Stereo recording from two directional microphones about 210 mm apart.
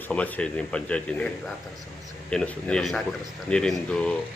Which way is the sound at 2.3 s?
5° left (ahead or behind).